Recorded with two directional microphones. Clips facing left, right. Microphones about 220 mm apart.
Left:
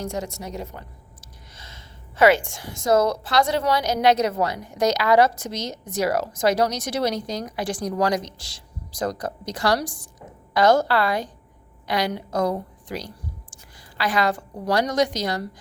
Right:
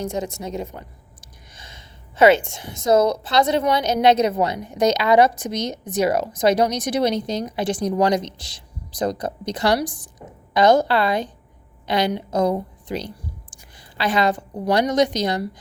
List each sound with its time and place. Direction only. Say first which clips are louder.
0.0 s a woman's voice: right 3 dB; 20° right (ahead or behind)